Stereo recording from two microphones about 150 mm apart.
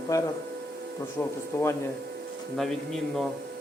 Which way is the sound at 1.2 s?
10° left (ahead or behind).